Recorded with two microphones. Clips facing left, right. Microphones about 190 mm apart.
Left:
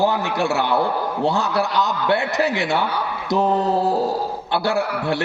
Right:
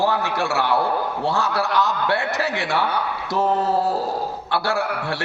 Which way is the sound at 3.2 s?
15° left (ahead or behind).